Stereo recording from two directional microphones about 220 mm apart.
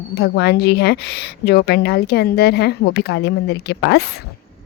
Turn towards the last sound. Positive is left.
turn(degrees=50)  # may be behind; listen again after turning